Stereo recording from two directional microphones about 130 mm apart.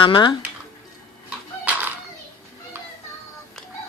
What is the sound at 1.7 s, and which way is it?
Children playing, 10° right (ahead or behind).